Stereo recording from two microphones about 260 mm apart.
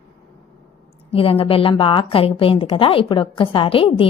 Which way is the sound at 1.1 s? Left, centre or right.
Left.